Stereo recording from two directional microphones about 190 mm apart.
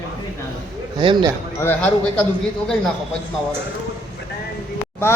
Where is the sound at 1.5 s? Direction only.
10° left (ahead or behind).